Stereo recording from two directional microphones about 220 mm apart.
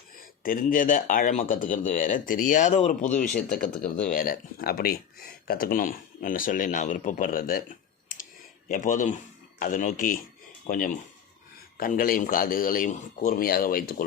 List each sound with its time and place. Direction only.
0.4 s speech: 40° left (ahead or behind)
8.7 s speech: 35° left (ahead or behind)